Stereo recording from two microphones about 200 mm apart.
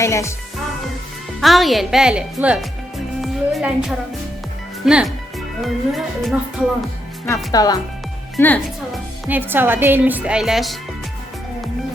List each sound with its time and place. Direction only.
0.0 s speech: 15° left (ahead or behind)
1.4 s a woman's voice: centre (ahead or behind)
7.5 s speech: 20° left (ahead or behind); by 10.8 s centre (ahead or behind)